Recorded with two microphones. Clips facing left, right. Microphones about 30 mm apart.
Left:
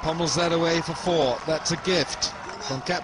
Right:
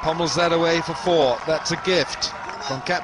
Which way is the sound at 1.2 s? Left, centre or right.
Centre.